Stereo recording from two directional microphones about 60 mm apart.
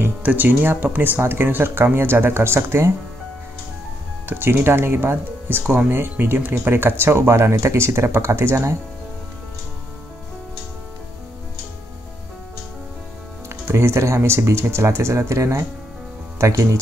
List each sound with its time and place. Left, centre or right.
0.2 s speech: right
4.3 s speech: right
6.7 s speech: right
13.5 s speech: right